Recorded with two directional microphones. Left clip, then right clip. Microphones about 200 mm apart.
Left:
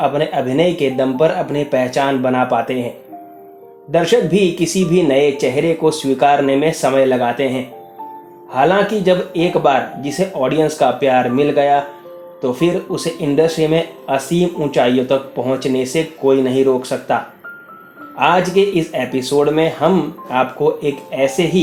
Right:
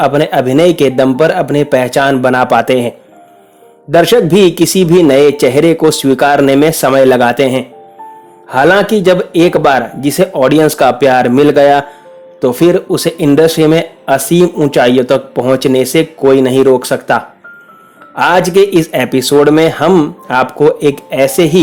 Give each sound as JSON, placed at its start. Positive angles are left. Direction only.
{"t": 0.0, "sound": "speech", "side_deg": -55}
{"t": 3.9, "sound": "speech", "side_deg": -55}
{"t": 18.2, "sound": "speech", "side_deg": -55}